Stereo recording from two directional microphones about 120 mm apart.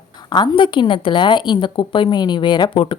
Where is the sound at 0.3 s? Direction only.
40° left (ahead or behind).